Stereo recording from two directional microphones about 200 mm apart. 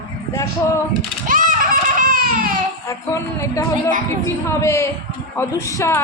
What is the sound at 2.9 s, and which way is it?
Speech, 15° left (ahead or behind).